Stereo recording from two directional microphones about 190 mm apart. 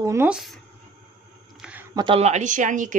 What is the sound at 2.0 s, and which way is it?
Speech, 30° right (ahead or behind).